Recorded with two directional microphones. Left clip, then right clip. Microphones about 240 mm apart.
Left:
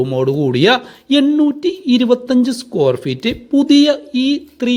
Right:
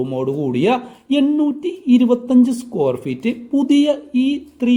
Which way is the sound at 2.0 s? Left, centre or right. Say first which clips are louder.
Left 3 dB; left.